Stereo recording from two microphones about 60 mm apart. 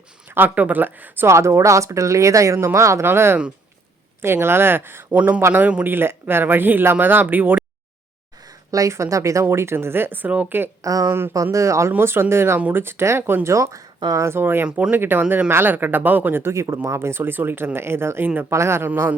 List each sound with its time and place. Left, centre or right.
0.3 s speech: right
1.3 s speech: right
3.1 s speech: right
5.1 s a man's voice: right
5.8 s speech: right
8.4 s speech: right
10.8 s speech: right
11.5 s speech: right
11.9 s speech: right
13.5 s speech: right
14.3 s speech: right
16.4 s speech: right